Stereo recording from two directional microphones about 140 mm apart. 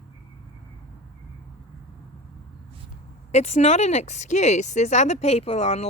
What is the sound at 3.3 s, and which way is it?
Speech, 55° left (ahead or behind).